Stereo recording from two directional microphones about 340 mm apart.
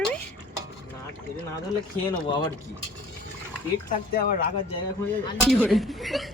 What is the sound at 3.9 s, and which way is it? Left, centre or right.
Speech, left.